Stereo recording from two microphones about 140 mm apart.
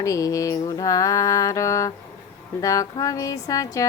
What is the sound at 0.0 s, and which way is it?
Speech, 25° left (ahead or behind).